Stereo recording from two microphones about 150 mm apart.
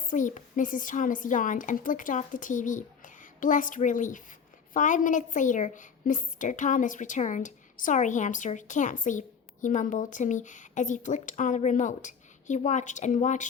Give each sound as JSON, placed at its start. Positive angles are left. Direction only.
{"t": 0.1, "sound": "a woman's voice", "side_deg": 60}